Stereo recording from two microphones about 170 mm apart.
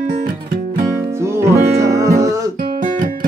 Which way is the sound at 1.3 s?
20° right (ahead or behind).